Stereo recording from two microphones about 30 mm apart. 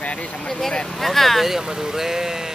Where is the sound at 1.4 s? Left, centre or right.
Centre.